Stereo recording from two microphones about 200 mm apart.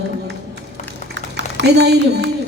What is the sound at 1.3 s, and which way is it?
Speech, 60° right (ahead or behind).